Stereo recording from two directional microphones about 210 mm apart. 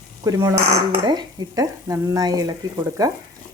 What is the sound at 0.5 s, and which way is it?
Speech, 30° right (ahead or behind).